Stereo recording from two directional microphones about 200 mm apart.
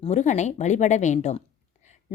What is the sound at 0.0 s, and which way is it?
Speech, 35° left (ahead or behind).